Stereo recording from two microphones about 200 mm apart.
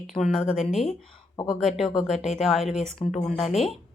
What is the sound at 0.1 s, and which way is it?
Speech, centre (ahead or behind).